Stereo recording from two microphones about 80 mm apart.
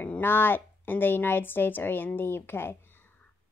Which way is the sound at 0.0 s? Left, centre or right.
Left.